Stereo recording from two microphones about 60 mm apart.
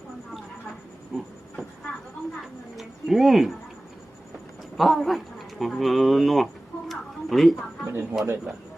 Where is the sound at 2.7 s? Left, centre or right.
Centre.